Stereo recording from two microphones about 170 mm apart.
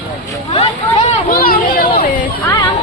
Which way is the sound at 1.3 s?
55° left (ahead or behind).